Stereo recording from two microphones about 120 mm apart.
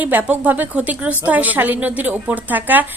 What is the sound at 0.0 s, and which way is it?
A woman's voice, 15° right (ahead or behind).